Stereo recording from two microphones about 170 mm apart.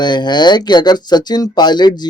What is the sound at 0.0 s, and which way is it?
Speech, 25° left (ahead or behind).